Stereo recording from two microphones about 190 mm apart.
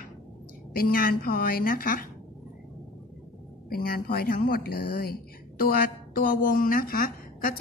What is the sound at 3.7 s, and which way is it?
A woman's voice, 55° left (ahead or behind).